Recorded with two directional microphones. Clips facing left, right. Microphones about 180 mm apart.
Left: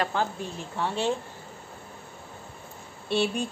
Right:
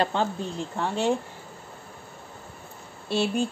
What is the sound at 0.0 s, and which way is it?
Speech, 25° right (ahead or behind).